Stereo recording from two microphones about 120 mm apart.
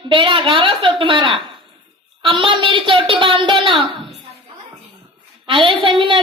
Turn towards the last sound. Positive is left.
turn(degrees=-45)  # may be behind; listen again after turning